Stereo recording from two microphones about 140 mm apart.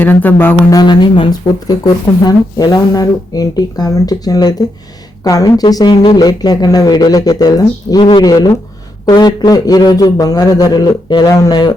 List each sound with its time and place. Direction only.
0.0 s speech: 15° left (ahead or behind)
0.8 s speech: 30° left (ahead or behind)